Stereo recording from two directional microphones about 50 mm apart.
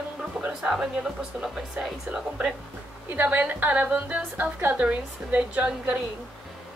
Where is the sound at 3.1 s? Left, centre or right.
Right.